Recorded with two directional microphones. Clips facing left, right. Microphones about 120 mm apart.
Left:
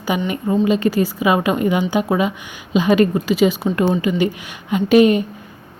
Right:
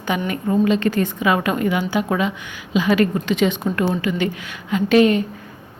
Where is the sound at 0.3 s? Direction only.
15° left (ahead or behind).